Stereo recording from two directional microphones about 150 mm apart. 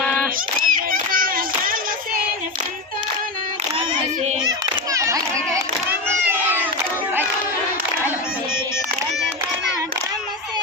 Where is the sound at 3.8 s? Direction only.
40° right (ahead or behind).